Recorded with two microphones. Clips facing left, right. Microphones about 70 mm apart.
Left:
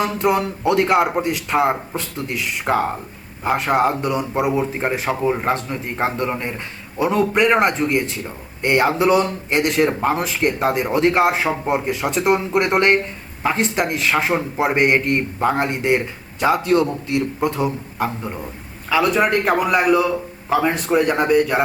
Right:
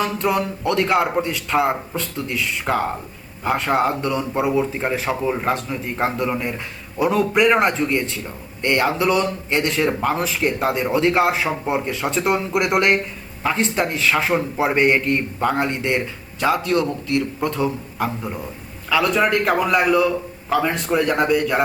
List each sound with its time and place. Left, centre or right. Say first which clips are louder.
0.2 s a man's voice: left 2 dB; centre